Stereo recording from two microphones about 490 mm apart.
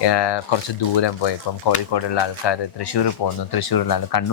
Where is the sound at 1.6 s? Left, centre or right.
Left.